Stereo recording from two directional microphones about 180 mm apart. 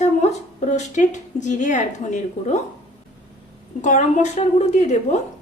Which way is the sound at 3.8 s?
40° left (ahead or behind).